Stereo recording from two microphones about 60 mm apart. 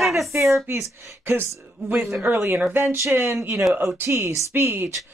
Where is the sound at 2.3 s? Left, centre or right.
Right.